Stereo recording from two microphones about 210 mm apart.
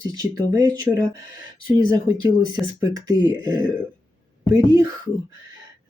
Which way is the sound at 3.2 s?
15° right (ahead or behind).